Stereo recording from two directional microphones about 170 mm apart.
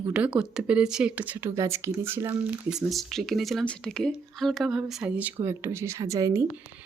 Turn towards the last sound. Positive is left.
turn(degrees=-20)  # may be behind; listen again after turning